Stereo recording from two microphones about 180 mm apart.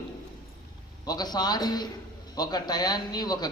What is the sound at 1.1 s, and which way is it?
Speech, 20° left (ahead or behind).